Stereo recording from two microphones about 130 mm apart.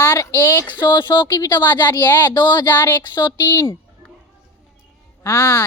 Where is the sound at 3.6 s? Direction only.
20° left (ahead or behind).